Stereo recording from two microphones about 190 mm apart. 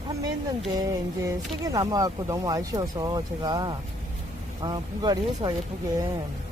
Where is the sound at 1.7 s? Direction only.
20° right (ahead or behind).